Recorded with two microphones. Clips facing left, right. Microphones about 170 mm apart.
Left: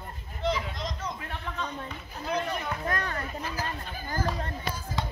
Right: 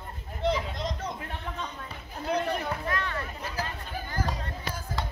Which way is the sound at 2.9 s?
40° left (ahead or behind).